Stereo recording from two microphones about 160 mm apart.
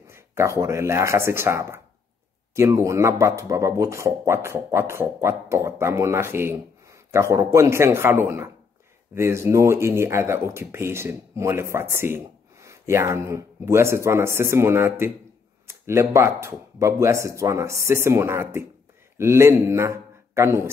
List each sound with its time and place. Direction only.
0.1 s speech: 15° right (ahead or behind)